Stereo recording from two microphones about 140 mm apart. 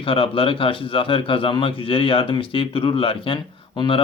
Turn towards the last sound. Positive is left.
turn(degrees=35)  # may be behind; listen again after turning